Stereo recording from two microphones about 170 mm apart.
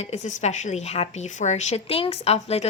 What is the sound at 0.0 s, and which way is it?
A woman's voice, 40° left (ahead or behind).